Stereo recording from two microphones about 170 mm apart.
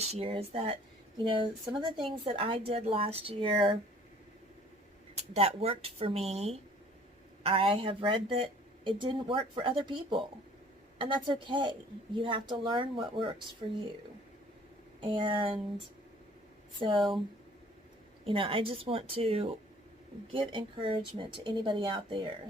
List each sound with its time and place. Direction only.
0.0 s a woman's voice: 35° right (ahead or behind)
5.3 s a woman's voice: 35° right (ahead or behind)
15.0 s speech: 30° right (ahead or behind)
16.8 s a woman's voice: 30° right (ahead or behind)
18.3 s a woman's voice: 35° right (ahead or behind)